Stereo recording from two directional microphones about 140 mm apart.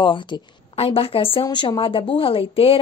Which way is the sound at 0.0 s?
35° left (ahead or behind).